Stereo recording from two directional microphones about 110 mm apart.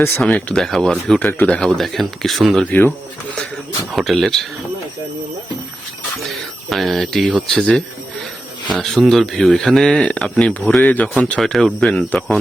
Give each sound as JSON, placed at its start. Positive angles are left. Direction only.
{"t": 0.2, "sound": "speech", "side_deg": 10}
{"t": 1.2, "sound": "speech", "side_deg": 20}
{"t": 1.5, "sound": "speech", "side_deg": 5}
{"t": 3.9, "sound": "speech", "side_deg": 0}
{"t": 6.3, "sound": "speech", "side_deg": 0}
{"t": 11.3, "sound": "speech", "side_deg": 0}